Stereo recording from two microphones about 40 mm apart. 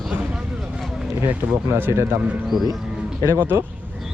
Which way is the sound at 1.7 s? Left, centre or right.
Right.